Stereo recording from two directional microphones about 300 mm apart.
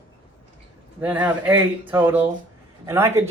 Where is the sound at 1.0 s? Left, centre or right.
Centre.